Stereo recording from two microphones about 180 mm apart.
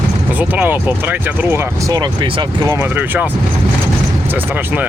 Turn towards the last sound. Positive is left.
turn(degrees=-10)  # may be behind; listen again after turning